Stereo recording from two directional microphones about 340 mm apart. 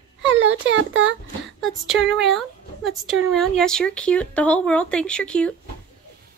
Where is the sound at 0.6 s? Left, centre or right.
Right.